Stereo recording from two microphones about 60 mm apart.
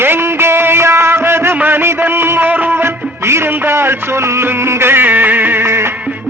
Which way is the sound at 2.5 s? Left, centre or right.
Right.